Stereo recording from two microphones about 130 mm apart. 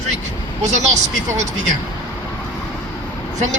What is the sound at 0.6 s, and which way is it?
Speech, 65° right (ahead or behind).